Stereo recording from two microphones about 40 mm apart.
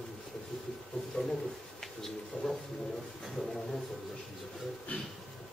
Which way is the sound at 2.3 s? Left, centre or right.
Centre.